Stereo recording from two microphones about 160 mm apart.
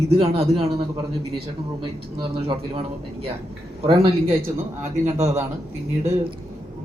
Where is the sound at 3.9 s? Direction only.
35° right (ahead or behind).